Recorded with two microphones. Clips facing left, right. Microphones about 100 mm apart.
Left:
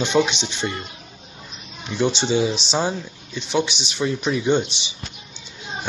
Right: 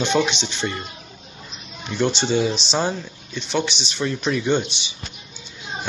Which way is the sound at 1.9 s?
5° left (ahead or behind).